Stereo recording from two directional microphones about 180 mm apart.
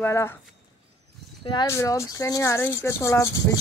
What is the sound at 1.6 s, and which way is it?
Speech, 15° left (ahead or behind).